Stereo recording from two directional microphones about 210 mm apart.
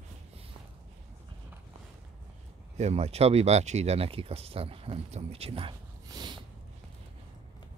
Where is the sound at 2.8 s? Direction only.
30° right (ahead or behind).